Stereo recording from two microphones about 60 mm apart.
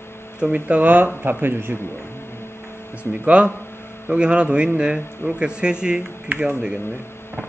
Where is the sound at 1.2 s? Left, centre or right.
Right.